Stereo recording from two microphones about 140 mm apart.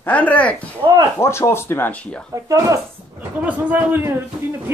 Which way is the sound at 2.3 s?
25° right (ahead or behind).